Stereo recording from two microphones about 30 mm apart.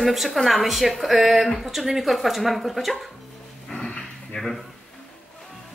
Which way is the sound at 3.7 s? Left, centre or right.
Centre.